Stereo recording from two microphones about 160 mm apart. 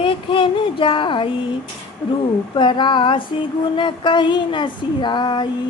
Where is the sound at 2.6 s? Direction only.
30° left (ahead or behind).